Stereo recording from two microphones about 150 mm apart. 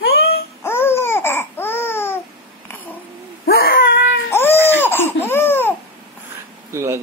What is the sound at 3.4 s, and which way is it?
Wail, 90° left.